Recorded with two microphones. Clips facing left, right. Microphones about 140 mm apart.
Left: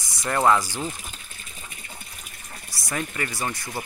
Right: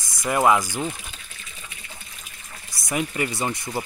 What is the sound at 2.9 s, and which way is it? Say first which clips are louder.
Speech: right 4 dB; 20° right (ahead or behind).